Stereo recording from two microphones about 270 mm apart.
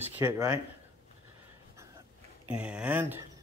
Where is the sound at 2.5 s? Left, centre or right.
Centre.